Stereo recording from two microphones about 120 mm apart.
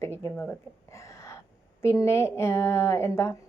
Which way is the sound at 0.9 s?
25° left (ahead or behind).